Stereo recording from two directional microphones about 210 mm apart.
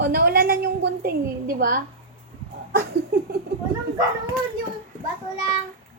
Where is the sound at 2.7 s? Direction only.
50° right (ahead or behind).